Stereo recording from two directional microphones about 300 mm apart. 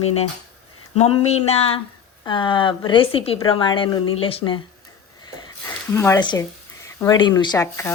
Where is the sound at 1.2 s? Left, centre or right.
Left.